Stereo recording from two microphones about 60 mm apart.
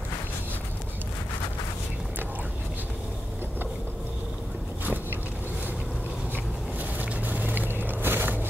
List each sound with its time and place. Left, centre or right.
7.0 s vehicle: right